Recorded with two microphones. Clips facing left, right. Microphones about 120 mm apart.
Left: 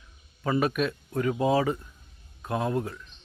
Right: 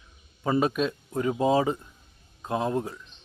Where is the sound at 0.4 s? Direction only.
25° right (ahead or behind).